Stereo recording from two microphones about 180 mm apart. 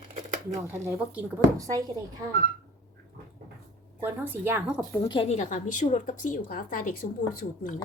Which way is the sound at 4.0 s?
10° right (ahead or behind).